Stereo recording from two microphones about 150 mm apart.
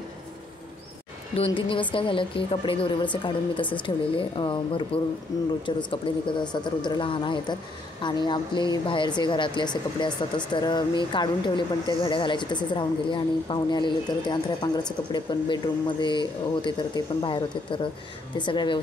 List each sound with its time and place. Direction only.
1.3 s speech: 35° left (ahead or behind)